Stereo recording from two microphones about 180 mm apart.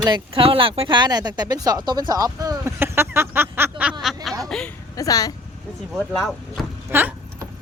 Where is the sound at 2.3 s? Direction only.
20° right (ahead or behind); by 4.1 s 5° right (ahead or behind).